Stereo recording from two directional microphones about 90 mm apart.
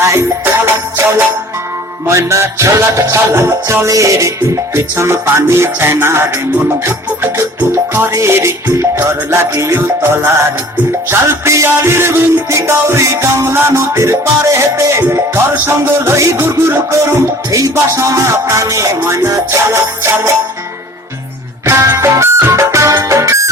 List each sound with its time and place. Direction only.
0.0 s music: 25° right (ahead or behind)
2.0 s music: 30° right (ahead or behind)
21.8 s music: 30° right (ahead or behind)